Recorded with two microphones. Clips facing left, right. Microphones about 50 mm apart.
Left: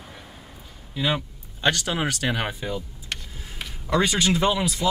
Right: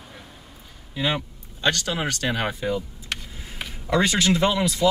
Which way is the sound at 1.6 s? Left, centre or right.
Centre.